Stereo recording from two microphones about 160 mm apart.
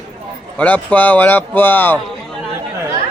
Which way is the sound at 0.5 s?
10° left (ahead or behind).